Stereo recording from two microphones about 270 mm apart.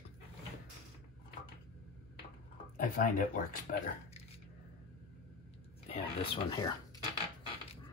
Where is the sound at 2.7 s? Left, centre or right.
Left.